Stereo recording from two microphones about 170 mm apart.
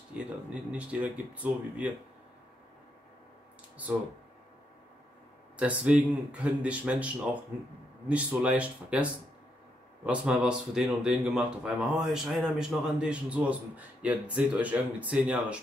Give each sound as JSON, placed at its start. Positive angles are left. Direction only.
{"t": 0.2, "sound": "speech", "side_deg": -5}
{"t": 5.6, "sound": "speech", "side_deg": -5}
{"t": 8.1, "sound": "speech", "side_deg": -10}